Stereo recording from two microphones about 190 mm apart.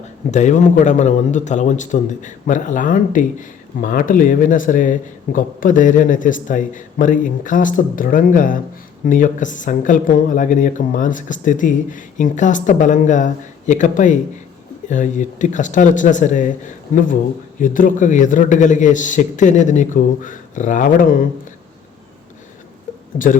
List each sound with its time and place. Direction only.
0.3 s a man's voice: 40° left (ahead or behind)
23.1 s speech: 45° left (ahead or behind)